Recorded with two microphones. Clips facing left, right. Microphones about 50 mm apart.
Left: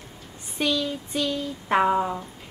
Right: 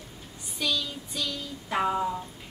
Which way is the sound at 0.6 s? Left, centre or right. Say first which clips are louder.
Left 5 dB; left.